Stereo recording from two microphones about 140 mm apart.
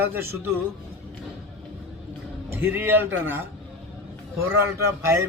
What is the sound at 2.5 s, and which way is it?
Speech, 15° right (ahead or behind).